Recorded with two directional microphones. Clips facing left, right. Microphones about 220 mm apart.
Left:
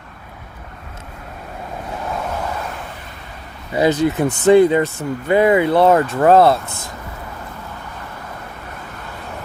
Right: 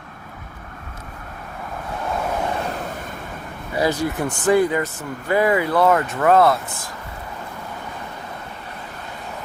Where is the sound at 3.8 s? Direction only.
20° left (ahead or behind).